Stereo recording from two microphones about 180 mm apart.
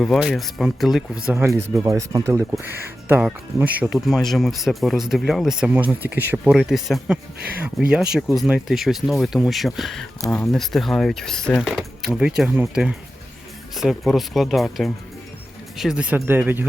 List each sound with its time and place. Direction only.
0.0 s speech: centre (ahead or behind)